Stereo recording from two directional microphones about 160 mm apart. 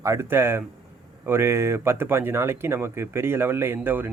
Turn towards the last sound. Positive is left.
turn(degrees=-10)  # may be behind; listen again after turning